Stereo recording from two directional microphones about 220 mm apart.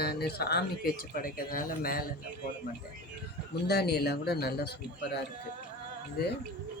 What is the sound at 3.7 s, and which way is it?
Speech, 45° left (ahead or behind).